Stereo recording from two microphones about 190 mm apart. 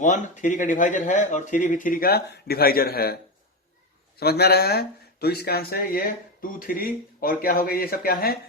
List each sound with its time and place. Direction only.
0.0 s speech: 40° left (ahead or behind)
4.2 s speech: 55° left (ahead or behind)